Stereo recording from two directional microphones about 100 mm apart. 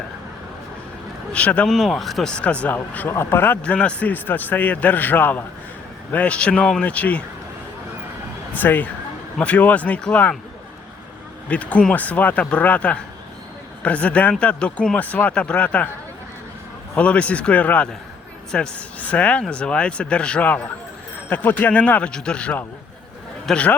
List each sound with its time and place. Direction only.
1.3 s speech: 15° left (ahead or behind)
1.7 s speech: centre (ahead or behind)
8.5 s speech: 20° left (ahead or behind)
11.4 s speech: 15° left (ahead or behind)
16.9 s speech: 10° left (ahead or behind)